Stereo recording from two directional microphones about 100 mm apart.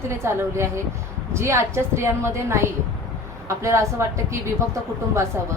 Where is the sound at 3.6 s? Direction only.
30° right (ahead or behind).